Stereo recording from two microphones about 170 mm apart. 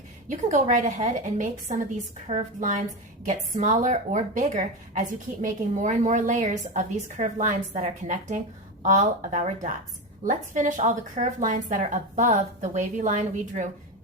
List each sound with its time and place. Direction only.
0.3 s a woman's voice: 45° right (ahead or behind)